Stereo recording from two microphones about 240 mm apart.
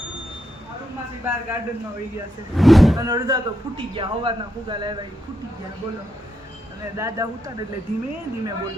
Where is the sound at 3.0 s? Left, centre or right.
Centre.